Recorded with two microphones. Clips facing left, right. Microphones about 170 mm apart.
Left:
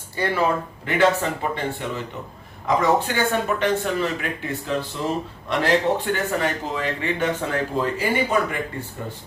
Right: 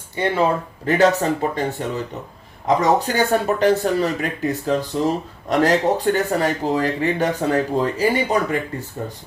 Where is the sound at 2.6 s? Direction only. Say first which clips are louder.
Right 2 dB; 40° right (ahead or behind).